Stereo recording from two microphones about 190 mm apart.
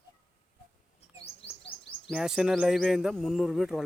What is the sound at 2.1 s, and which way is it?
Speech, centre (ahead or behind).